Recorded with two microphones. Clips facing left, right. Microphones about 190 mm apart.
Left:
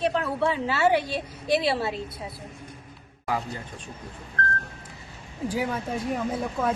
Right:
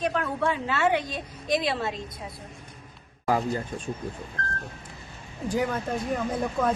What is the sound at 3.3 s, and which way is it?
Speech, 45° right (ahead or behind).